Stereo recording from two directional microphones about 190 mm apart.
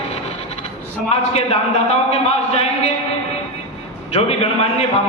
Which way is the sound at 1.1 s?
35° left (ahead or behind).